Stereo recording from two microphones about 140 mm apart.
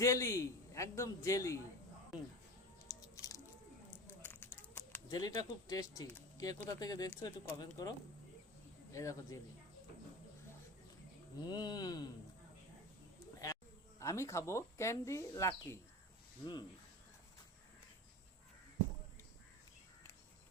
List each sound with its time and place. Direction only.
0.0 s speech: 20° left (ahead or behind)
2.8 s a sound: 25° left (ahead or behind)
4.2 s a sound: 15° left (ahead or behind)
5.1 s speech: 30° left (ahead or behind)
11.4 s speech: 30° left (ahead or behind)
14.0 s speech: 20° left (ahead or behind)